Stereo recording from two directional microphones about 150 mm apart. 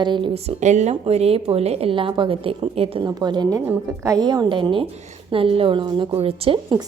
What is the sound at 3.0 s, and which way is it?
A woman's voice, 30° right (ahead or behind).